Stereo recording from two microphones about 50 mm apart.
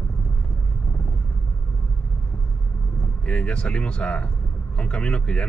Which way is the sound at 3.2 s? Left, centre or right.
Left.